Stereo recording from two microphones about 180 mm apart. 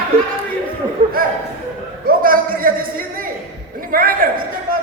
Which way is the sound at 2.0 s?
50° right (ahead or behind).